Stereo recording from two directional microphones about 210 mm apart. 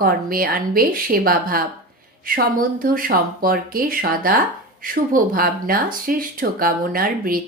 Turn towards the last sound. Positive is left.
turn(degrees=-45)  # may be behind; listen again after turning